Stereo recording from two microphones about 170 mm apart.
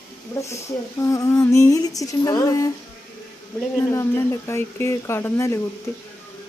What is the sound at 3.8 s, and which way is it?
Speech, 15° left (ahead or behind).